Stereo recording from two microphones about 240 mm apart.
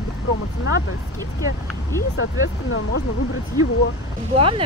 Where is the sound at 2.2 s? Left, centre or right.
Left.